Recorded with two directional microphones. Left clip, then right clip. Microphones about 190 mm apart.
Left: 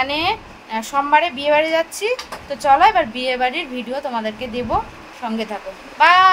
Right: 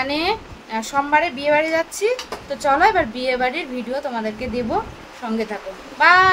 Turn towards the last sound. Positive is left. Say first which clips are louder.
# left 1 dB
turn(degrees=-15)  # may be behind; listen again after turning